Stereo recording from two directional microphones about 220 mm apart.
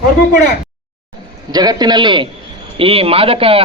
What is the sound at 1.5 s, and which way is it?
A man's voice, 20° right (ahead or behind).